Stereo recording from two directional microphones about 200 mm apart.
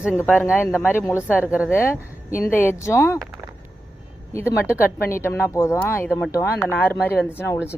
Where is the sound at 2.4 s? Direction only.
10° left (ahead or behind).